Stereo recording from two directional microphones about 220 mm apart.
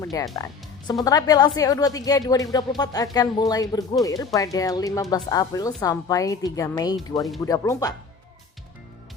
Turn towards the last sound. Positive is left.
turn(degrees=15)  # may be behind; listen again after turning